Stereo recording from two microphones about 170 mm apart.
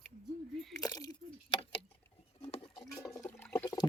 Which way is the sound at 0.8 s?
25° left (ahead or behind).